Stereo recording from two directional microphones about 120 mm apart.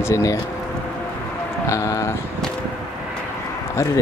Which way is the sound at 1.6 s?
25° left (ahead or behind).